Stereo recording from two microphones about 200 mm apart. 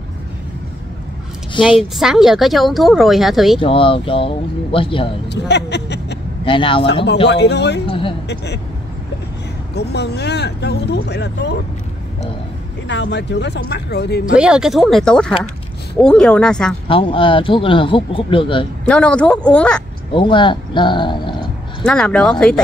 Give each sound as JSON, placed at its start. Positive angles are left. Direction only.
{"t": 1.8, "sound": "speech", "side_deg": 0}
{"t": 3.5, "sound": "a man's voice", "side_deg": 25}
{"t": 5.3, "sound": "speech", "side_deg": 60}
{"t": 6.4, "sound": "a man's voice", "side_deg": 25}
{"t": 7.2, "sound": "speech", "side_deg": 55}
{"t": 9.8, "sound": "speech", "side_deg": 55}
{"t": 12.8, "sound": "speech", "side_deg": 60}
{"t": 14.3, "sound": "speech", "side_deg": -5}
{"t": 16.8, "sound": "a man's voice", "side_deg": 25}
{"t": 18.9, "sound": "speech", "side_deg": 5}
{"t": 20.2, "sound": "a man's voice", "side_deg": 25}
{"t": 21.8, "sound": "speech", "side_deg": 5}